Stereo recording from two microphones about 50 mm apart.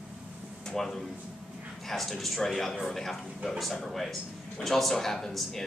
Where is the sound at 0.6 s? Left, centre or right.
Centre.